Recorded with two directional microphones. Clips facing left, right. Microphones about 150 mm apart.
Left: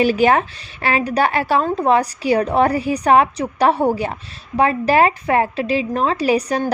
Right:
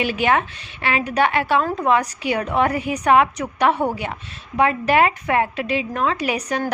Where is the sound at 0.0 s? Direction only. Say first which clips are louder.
Left 5 dB; 40° left (ahead or behind).